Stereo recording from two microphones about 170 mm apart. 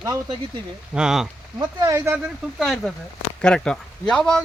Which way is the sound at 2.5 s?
Centre (ahead or behind).